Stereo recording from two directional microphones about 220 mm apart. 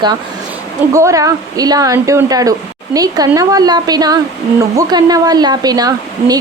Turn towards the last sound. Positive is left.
turn(degrees=-15)  # may be behind; listen again after turning